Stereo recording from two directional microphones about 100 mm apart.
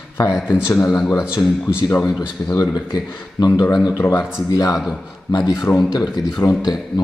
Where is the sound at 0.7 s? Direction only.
25° left (ahead or behind).